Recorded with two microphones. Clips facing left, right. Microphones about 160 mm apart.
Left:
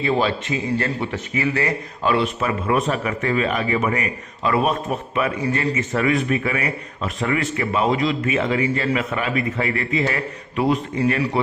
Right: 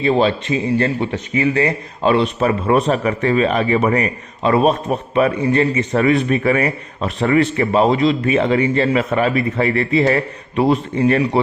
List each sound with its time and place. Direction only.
0.0 s a man's voice: 25° right (ahead or behind)
4.4 s a man's voice: 25° right (ahead or behind)